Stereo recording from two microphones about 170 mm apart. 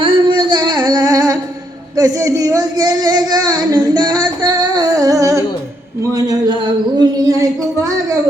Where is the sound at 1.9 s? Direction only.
20° right (ahead or behind).